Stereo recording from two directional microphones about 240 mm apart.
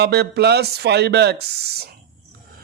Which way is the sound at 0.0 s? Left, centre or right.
Right.